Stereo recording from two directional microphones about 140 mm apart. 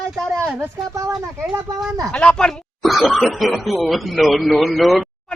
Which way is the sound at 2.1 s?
5° left (ahead or behind).